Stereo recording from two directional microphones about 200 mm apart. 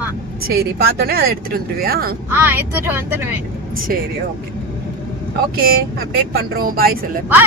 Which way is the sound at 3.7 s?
45° right (ahead or behind).